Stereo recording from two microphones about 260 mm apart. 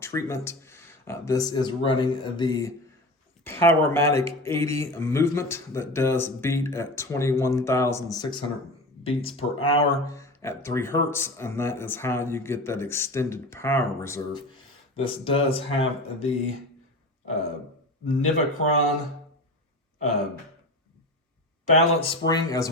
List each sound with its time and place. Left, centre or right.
0.0 s speech: centre
14.9 s speech: left
18.0 s speech: left
21.7 s speech: centre